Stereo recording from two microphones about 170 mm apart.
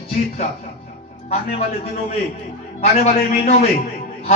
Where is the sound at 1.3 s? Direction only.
40° left (ahead or behind).